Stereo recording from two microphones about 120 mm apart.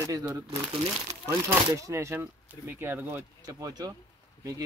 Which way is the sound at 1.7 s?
25° right (ahead or behind).